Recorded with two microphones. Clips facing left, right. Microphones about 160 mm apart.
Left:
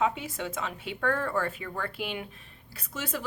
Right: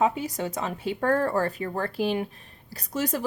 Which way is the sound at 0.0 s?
40° right (ahead or behind).